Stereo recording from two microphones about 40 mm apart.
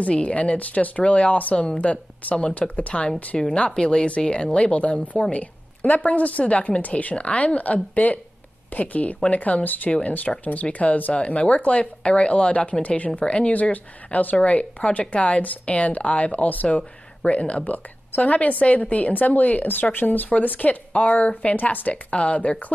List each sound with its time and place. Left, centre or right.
0.0 s a woman's voice: left
2.9 s speech: centre
3.4 s a woman's voice: left
4.7 s a woman's voice: left
9.8 s speech: left
10.4 s a woman's voice: left
13.2 s speech: left
13.5 s a woman's voice: left
20.2 s a woman's voice: left
22.1 s speech: left